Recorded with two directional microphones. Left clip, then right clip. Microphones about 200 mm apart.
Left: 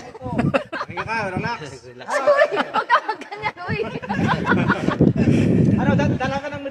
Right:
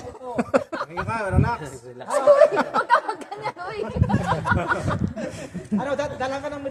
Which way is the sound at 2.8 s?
65° right (ahead or behind).